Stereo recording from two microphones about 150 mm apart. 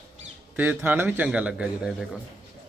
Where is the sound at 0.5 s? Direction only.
10° right (ahead or behind).